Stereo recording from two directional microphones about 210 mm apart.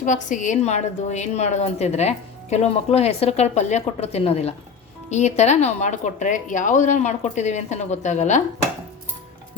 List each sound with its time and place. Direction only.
0.0 s a woman's voice: 35° left (ahead or behind)